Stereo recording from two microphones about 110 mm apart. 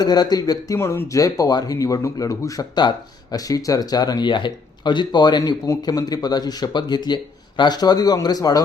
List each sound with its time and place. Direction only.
0.0 s speech: 40° left (ahead or behind)
0.8 s speech: 25° left (ahead or behind)